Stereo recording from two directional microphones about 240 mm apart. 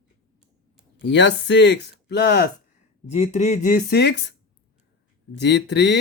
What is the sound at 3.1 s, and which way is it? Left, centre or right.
Speech, left.